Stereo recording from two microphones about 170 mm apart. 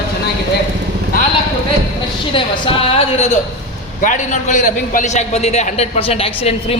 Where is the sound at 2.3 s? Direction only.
35° left (ahead or behind).